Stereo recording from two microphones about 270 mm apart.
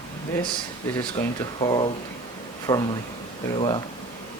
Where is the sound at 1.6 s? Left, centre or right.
Centre.